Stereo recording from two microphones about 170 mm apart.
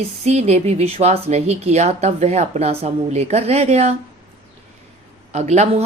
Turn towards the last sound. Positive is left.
turn(degrees=-40)  # may be behind; listen again after turning